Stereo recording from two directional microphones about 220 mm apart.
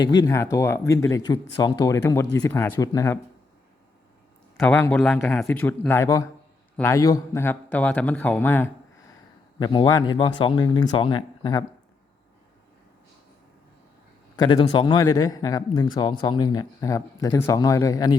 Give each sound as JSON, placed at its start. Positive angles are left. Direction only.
{"t": 0.0, "sound": "a man's voice", "side_deg": 20}
{"t": 4.5, "sound": "a man's voice", "side_deg": 10}
{"t": 14.3, "sound": "a man's voice", "side_deg": 20}